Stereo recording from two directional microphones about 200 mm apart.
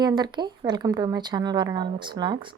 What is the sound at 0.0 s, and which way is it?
A woman's voice, 20° right (ahead or behind).